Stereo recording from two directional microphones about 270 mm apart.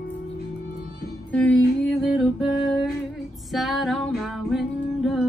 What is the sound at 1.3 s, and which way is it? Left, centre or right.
Music, centre.